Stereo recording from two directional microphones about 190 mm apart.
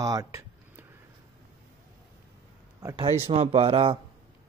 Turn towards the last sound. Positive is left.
turn(degrees=-30)  # may be behind; listen again after turning